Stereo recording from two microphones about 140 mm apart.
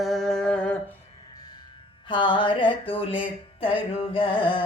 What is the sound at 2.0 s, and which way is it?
Speech, 35° left (ahead or behind).